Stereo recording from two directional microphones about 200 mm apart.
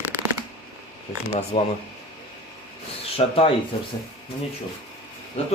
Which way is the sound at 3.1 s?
30° left (ahead or behind).